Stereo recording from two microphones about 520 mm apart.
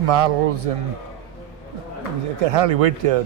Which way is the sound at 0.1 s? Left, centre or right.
Right.